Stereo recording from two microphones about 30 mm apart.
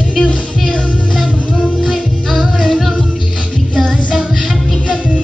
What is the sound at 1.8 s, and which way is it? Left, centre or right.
Music, centre.